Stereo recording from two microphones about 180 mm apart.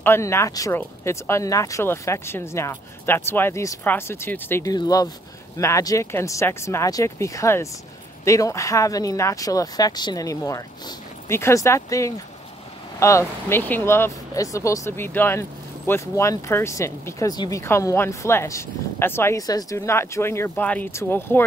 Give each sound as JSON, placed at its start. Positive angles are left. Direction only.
{"t": 0.0, "sound": "speech", "side_deg": 15}